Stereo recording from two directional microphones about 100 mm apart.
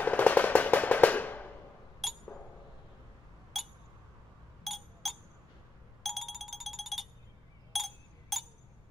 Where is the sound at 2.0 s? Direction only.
Centre (ahead or behind).